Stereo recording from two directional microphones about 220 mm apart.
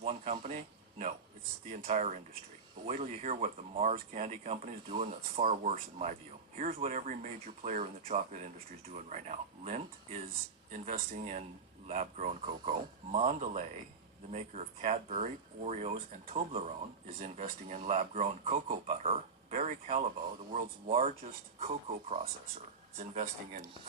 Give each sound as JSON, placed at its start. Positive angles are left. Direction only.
{"t": 0.0, "sound": "speech", "side_deg": -30}
{"t": 1.9, "sound": "speech", "side_deg": -30}